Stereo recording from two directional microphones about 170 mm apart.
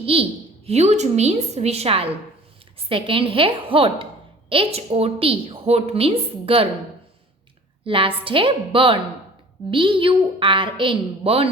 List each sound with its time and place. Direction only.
0.0 s a woman's voice: 35° right (ahead or behind)
7.9 s a woman's voice: 30° right (ahead or behind)